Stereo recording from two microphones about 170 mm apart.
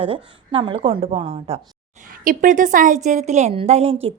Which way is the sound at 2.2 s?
50° right (ahead or behind).